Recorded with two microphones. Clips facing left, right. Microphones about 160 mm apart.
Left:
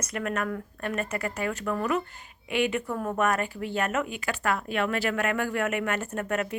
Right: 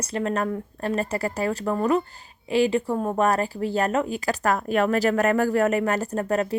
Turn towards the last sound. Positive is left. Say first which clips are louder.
# right 5 dB
turn(degrees=-35)  # may be behind; listen again after turning